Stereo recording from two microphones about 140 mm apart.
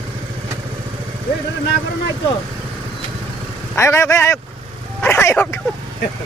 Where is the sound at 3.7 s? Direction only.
20° left (ahead or behind).